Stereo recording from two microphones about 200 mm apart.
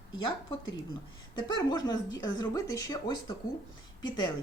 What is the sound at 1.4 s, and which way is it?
Speech, 20° left (ahead or behind).